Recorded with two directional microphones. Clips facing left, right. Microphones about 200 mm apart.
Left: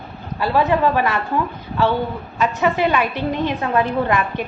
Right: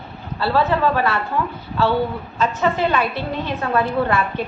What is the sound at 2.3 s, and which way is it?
A woman's voice, 10° left (ahead or behind).